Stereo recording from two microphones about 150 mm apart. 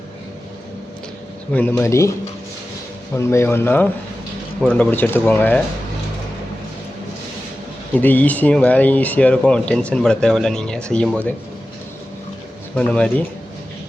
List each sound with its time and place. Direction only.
1.5 s speech: 10° left (ahead or behind)
3.2 s speech: 20° left (ahead or behind)
7.9 s speech: 10° left (ahead or behind)
12.7 s speech: 5° left (ahead or behind)